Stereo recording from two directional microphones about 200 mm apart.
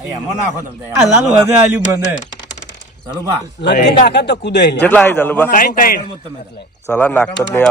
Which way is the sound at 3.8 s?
55° left (ahead or behind).